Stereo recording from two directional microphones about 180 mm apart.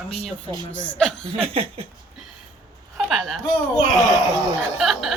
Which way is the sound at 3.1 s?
Centre (ahead or behind).